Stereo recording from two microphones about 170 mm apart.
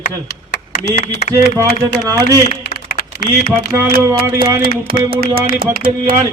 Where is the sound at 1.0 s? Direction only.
40° left (ahead or behind).